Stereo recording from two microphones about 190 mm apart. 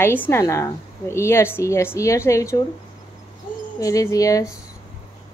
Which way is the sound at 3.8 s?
15° left (ahead or behind).